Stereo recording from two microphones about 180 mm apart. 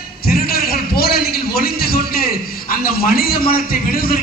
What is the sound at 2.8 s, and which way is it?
A man's voice, 55° left (ahead or behind).